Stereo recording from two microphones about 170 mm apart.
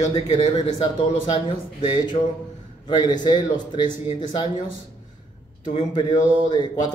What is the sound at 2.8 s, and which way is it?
A man's voice, 25° left (ahead or behind).